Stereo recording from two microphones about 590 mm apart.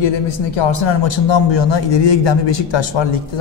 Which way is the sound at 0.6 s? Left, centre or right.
Left.